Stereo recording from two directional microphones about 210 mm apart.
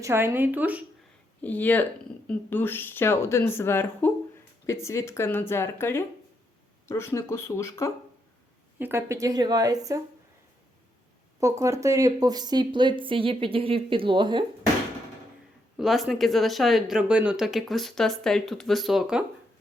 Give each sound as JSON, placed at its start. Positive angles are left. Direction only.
{"t": 0.0, "sound": "a woman's voice", "side_deg": -10}
{"t": 1.4, "sound": "speech", "side_deg": 10}
{"t": 8.8, "sound": "a woman's voice", "side_deg": -10}
{"t": 11.3, "sound": "speech", "side_deg": -15}
{"t": 15.8, "sound": "speech", "side_deg": 0}